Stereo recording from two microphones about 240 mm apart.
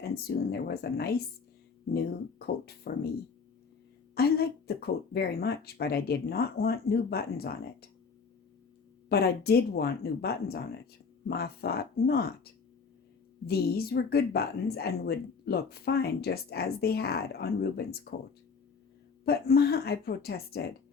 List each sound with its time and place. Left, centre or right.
0.0 s speech: left
2.4 s speech: left
4.1 s speech: left
9.0 s speech: left
13.5 s speech: left
19.2 s speech: left